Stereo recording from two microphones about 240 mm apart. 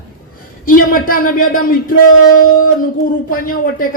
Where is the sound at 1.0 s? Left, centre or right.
Left.